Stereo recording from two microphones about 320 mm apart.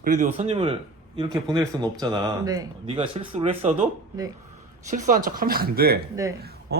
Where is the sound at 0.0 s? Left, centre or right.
Right.